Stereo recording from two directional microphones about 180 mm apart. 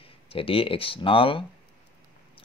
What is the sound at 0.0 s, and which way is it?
Speech, 30° left (ahead or behind).